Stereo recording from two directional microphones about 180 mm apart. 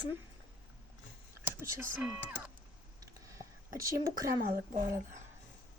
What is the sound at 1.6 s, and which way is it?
Speech, 10° right (ahead or behind).